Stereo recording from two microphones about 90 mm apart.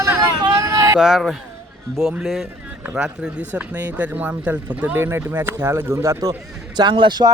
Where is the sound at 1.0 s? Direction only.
5° right (ahead or behind); by 6.3 s 30° right (ahead or behind).